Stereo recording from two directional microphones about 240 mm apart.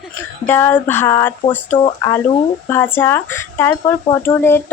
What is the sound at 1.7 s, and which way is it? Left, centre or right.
Speech, centre.